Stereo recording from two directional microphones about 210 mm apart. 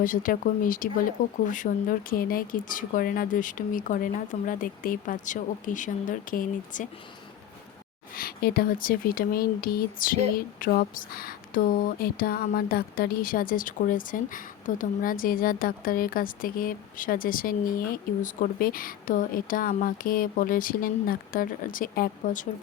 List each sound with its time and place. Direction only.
0.0 s speech: 40° left (ahead or behind)
8.1 s speech: 45° left (ahead or behind)